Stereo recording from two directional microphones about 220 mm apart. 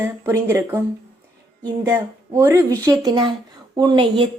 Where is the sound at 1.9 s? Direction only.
15° right (ahead or behind).